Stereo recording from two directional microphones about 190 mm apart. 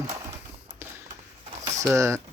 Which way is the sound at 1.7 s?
15° right (ahead or behind).